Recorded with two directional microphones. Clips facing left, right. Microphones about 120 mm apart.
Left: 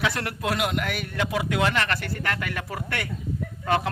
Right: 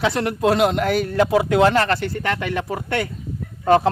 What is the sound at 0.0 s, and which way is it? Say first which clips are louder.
Speech: right 8 dB; 25° right (ahead or behind).